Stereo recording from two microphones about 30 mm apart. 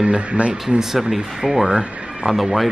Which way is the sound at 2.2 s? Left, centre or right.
Centre.